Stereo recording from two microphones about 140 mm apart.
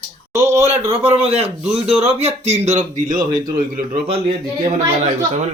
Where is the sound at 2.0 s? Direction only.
50° right (ahead or behind).